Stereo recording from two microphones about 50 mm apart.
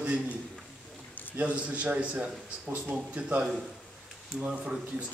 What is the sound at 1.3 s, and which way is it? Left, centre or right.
A man's voice, right.